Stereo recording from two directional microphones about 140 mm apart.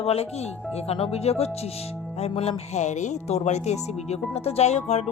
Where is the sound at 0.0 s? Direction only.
45° left (ahead or behind).